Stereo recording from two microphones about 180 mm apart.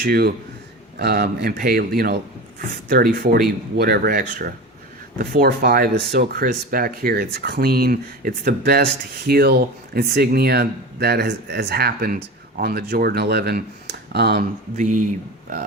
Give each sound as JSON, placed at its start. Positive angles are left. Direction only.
{"t": 0.0, "sound": "speech", "side_deg": -60}
{"t": 14.8, "sound": "speech", "side_deg": -45}